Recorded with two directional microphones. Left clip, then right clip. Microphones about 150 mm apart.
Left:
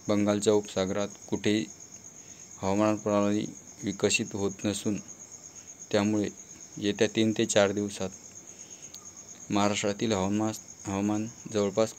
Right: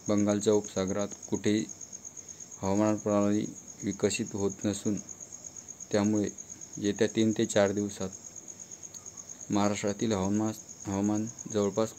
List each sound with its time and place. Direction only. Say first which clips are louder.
0.0 s speech: left 2 dB; 5° right (ahead or behind)
9.5 s speech: left 2 dB; 5° right (ahead or behind)